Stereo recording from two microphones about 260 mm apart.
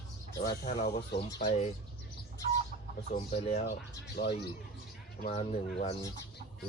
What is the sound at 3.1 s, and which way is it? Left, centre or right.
Speech, left.